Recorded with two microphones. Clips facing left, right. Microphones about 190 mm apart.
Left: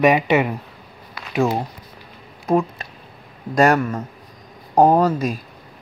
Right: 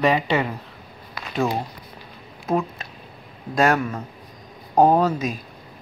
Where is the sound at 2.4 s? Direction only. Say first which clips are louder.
Left 4 dB; centre (ahead or behind).